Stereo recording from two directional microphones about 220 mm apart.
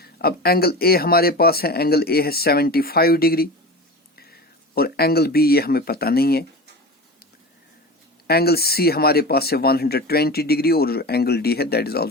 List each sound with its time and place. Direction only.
0.0 s speech: 45° left (ahead or behind)
8.3 s speech: 45° left (ahead or behind)